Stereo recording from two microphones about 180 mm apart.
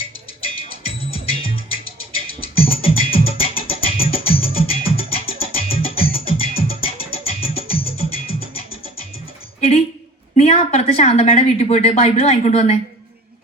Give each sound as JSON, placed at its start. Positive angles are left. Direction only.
{"t": 0.0, "sound": "music", "side_deg": 30}
{"t": 10.3, "sound": "a woman's voice", "side_deg": 35}